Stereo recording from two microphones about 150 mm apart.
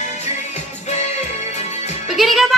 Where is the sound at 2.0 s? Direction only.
Centre (ahead or behind).